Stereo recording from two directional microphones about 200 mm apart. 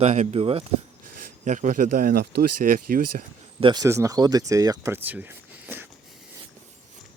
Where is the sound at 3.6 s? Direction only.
25° right (ahead or behind).